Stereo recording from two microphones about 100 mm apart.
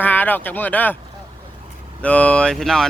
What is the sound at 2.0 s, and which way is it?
Speech, 10° left (ahead or behind).